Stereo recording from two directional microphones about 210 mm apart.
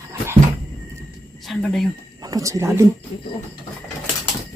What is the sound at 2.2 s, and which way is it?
Speech, 15° right (ahead or behind).